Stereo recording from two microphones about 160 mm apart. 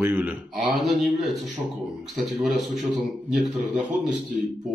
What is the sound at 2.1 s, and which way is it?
Speech, centre (ahead or behind).